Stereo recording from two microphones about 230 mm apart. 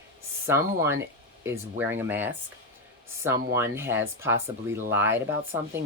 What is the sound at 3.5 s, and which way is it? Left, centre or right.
Speech, centre.